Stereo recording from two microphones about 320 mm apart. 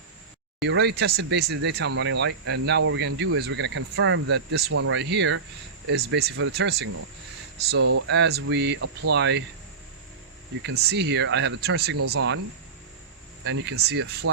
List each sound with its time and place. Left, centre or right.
0.6 s speech: right
8.0 s speech: right
10.6 s speech: right
13.4 s speech: right